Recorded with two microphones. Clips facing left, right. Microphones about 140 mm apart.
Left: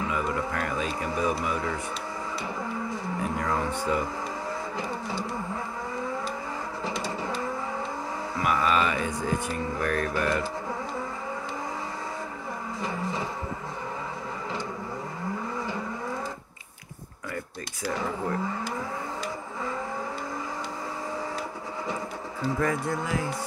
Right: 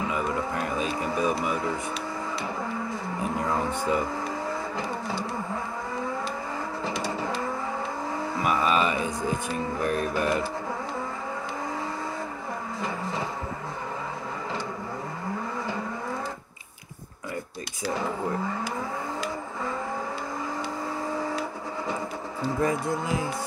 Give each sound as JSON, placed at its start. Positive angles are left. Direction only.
{"t": 0.1, "sound": "music", "side_deg": -20}
{"t": 3.9, "sound": "mantra", "side_deg": -20}
{"t": 8.4, "sound": "mantra", "side_deg": -20}
{"t": 22.6, "sound": "speech", "side_deg": -15}